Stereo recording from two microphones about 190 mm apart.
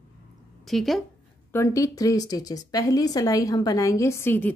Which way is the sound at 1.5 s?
15° left (ahead or behind).